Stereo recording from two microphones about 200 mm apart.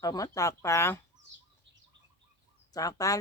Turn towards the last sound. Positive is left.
turn(degrees=15)  # may be behind; listen again after turning